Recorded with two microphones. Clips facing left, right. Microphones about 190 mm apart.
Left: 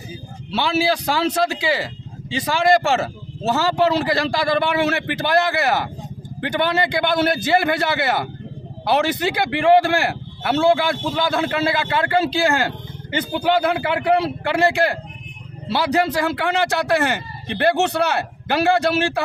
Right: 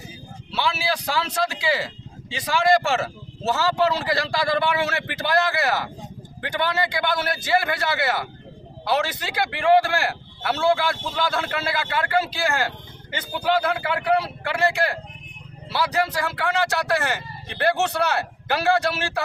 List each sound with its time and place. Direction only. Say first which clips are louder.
0.5 s a man's voice: left 6 dB; 25° left (ahead or behind)